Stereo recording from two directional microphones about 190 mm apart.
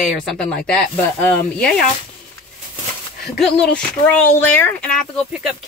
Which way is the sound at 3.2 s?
Centre (ahead or behind).